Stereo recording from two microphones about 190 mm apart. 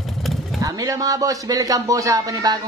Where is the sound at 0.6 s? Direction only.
20° right (ahead or behind).